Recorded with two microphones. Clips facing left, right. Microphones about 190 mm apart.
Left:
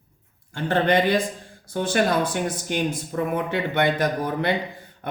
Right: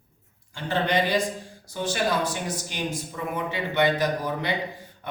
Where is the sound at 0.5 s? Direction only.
55° left (ahead or behind).